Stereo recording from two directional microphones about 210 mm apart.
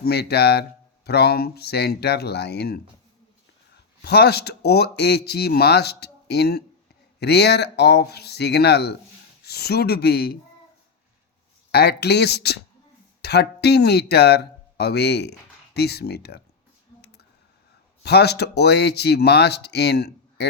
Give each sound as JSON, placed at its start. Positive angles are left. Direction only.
{"t": 0.0, "sound": "speech", "side_deg": 50}
{"t": 4.0, "sound": "speech", "side_deg": 50}
{"t": 11.7, "sound": "speech", "side_deg": 50}
{"t": 18.0, "sound": "speech", "side_deg": 50}